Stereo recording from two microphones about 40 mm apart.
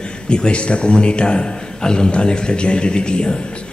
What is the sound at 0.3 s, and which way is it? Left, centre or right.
A man's voice, left.